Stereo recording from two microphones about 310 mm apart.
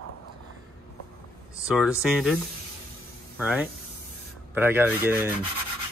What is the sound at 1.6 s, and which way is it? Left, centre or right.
Speech, centre.